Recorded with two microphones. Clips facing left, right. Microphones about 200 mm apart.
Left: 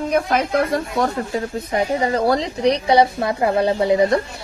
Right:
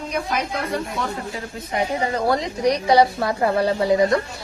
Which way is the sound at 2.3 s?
30° left (ahead or behind).